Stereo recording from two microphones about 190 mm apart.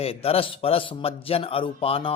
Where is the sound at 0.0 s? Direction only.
30° left (ahead or behind).